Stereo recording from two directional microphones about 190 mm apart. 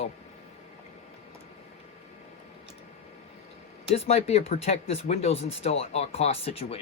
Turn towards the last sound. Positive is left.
turn(degrees=30)  # may be behind; listen again after turning